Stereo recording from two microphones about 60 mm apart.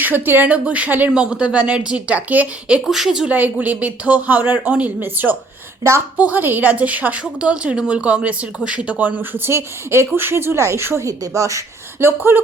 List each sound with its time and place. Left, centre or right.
0.0 s a woman's voice: right
1.1 s a woman's voice: centre
2.8 s speech: centre
3.2 s a woman's voice: right
4.9 s a woman's voice: right
9.5 s speech: right
11.9 s speech: right